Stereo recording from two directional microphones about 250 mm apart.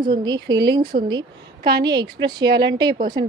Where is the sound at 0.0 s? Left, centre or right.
Centre.